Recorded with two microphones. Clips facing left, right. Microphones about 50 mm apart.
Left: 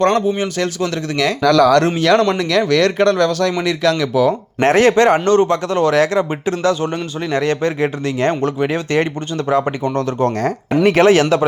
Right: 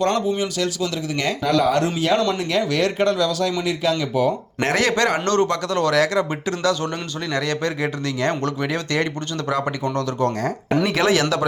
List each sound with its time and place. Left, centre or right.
0.0 s speech: left
1.1 s speech: left
2.0 s speech: left
2.4 s speech: left
3.6 s speech: left
4.6 s a man's voice: left